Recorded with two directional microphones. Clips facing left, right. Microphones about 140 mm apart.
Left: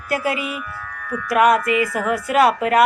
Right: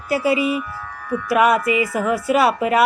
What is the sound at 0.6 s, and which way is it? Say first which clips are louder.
Speech: right 4 dB; 30° right (ahead or behind).